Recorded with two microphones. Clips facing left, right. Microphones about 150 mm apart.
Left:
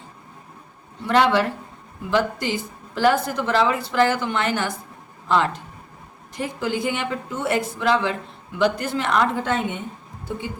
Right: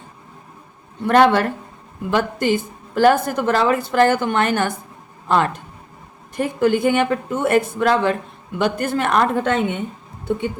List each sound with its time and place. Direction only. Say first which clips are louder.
1.0 s a woman's voice: right 4 dB; 50° right (ahead or behind)